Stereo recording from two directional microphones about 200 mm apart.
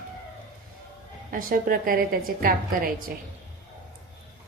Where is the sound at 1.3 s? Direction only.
45° right (ahead or behind).